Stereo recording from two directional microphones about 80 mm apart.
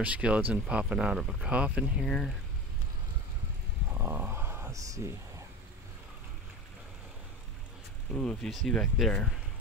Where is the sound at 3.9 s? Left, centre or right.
Right.